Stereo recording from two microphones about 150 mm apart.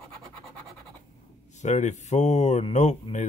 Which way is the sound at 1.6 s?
50° left (ahead or behind).